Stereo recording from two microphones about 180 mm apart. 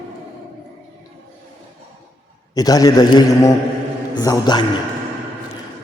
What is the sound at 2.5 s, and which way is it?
A man's voice, 20° left (ahead or behind).